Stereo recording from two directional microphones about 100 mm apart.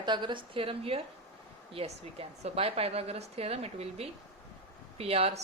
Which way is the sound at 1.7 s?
80° right.